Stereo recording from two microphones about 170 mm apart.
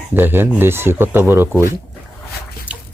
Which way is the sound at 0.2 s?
10° right (ahead or behind).